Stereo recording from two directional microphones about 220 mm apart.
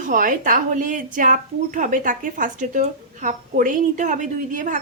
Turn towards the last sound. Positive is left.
turn(degrees=-35)  # may be behind; listen again after turning